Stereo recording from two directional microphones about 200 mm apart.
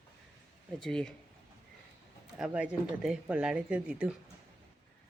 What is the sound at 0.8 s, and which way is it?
Speech, 5° left (ahead or behind).